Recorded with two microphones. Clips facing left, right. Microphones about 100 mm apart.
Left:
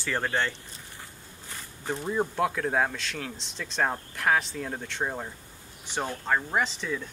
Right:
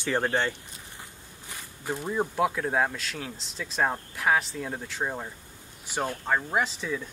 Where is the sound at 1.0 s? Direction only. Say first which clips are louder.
Even; 15° right (ahead or behind).